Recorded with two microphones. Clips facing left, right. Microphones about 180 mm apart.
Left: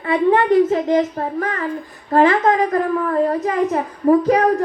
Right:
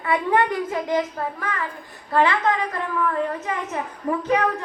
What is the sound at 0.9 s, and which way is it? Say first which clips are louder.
A child's voice: left 6 dB; 35° left (ahead or behind).